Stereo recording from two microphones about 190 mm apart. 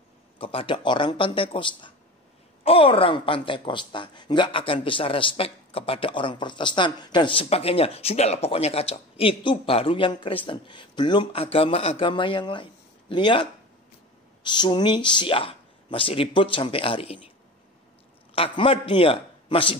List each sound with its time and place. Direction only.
0.4 s speech: 30° left (ahead or behind)
18.3 s a man's voice: 30° left (ahead or behind)